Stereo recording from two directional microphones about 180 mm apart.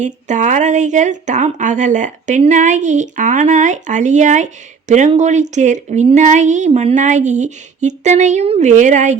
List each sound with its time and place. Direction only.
0.0 s speech: 40° right (ahead or behind)